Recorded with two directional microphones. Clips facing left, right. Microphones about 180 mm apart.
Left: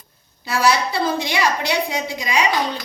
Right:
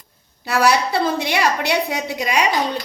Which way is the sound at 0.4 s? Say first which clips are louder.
Right 2 dB; 65° right (ahead or behind).